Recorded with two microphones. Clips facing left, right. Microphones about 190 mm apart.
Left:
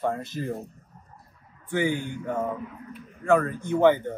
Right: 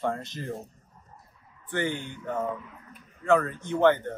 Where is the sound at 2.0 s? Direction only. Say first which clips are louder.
Left 5 dB; 50° left (ahead or behind).